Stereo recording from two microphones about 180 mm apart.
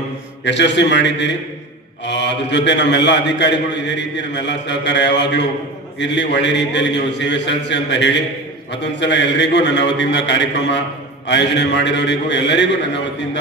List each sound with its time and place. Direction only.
0.5 s a man's voice: 75° left (ahead or behind)